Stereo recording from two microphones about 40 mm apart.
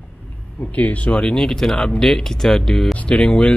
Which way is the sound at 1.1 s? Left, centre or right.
Left.